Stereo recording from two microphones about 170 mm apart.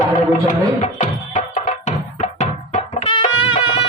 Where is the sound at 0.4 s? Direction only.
45° left (ahead or behind).